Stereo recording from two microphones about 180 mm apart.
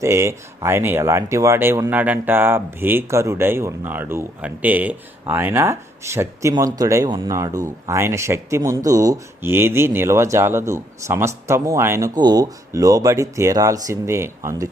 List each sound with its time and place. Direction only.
0.0 s speech: 15° right (ahead or behind)